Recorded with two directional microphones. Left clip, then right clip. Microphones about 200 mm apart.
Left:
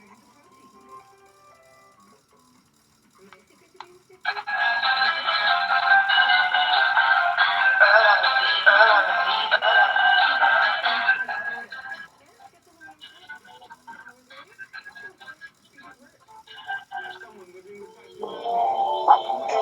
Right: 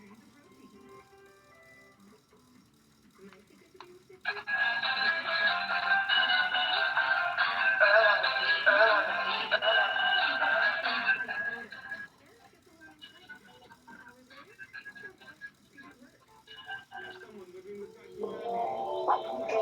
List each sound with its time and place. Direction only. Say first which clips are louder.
3.8 s music: left 7 dB; 20° left (ahead or behind)
14.3 s music: left 6 dB; 20° left (ahead or behind)
16.5 s music: left 10 dB; 20° left (ahead or behind)
18.4 s music: left 12 dB; 20° left (ahead or behind)